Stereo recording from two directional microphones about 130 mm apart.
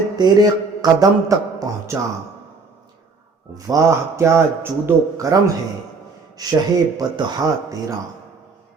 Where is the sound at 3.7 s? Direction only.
20° right (ahead or behind).